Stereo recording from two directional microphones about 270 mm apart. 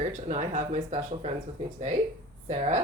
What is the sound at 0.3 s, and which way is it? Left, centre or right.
Speech, right.